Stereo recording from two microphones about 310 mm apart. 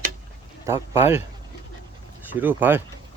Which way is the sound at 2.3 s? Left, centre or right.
Centre.